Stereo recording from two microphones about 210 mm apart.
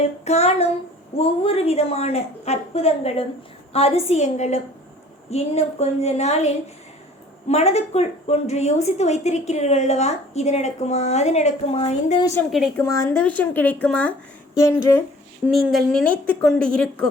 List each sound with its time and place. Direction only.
0.3 s a woman's voice: 30° left (ahead or behind)
12.2 s speech: 10° left (ahead or behind)
12.5 s a woman's voice: centre (ahead or behind)
12.7 s speech: 15° left (ahead or behind)
15.4 s a woman's voice: centre (ahead or behind)